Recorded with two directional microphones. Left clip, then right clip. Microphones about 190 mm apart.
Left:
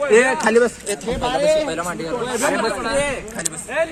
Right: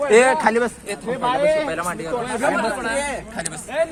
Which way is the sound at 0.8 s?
35° left (ahead or behind).